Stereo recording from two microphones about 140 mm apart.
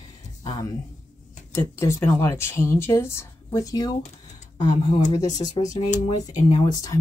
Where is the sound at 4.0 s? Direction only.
60° left (ahead or behind).